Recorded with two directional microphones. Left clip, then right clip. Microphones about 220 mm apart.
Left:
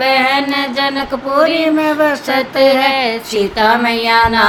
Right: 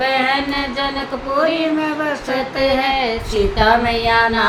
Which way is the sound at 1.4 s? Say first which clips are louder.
Left 5 dB; 45° left (ahead or behind).